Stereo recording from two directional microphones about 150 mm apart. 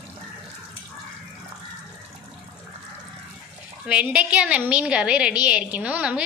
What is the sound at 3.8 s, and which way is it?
A woman's voice, 10° right (ahead or behind).